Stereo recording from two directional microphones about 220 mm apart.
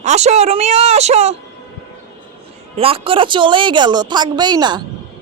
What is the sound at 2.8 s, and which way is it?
Speech, 25° right (ahead or behind).